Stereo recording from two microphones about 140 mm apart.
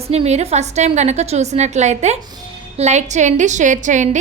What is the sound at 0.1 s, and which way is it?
A woman's voice, 50° right (ahead or behind).